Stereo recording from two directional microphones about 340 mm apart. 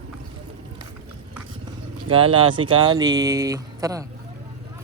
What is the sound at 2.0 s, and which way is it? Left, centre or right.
Speech, centre.